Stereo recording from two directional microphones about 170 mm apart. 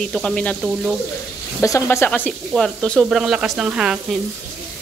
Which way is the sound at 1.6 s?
15° left (ahead or behind).